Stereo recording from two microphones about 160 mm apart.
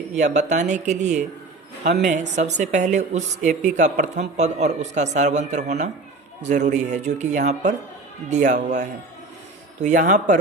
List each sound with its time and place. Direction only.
0.2 s a woman's voice: 50° right (ahead or behind)